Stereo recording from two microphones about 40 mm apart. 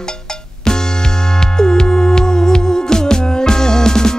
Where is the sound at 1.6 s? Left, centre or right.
Centre.